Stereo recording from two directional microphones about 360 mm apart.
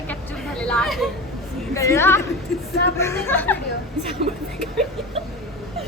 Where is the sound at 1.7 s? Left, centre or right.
Centre.